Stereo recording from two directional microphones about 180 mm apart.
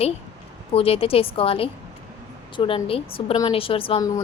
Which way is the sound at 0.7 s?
30° left (ahead or behind).